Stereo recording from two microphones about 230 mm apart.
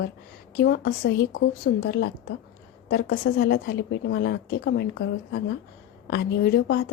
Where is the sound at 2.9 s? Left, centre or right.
Left.